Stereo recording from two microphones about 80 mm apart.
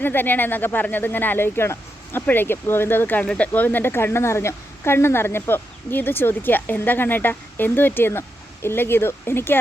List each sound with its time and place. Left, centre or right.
0.0 s a woman's voice: left